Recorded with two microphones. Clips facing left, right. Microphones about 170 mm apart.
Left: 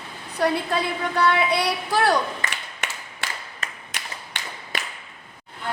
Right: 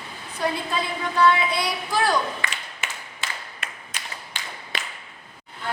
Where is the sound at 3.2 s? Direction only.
65° left (ahead or behind).